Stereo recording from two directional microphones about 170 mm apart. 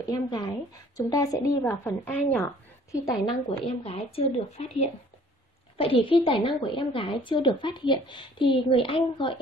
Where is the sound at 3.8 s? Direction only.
35° left (ahead or behind).